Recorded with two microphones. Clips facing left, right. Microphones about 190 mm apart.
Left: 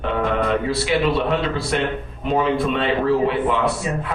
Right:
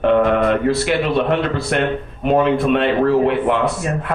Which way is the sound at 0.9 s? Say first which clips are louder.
Right 2 dB; 55° right (ahead or behind).